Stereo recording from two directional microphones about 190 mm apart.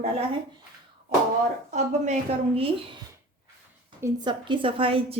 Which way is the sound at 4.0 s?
25° right (ahead or behind).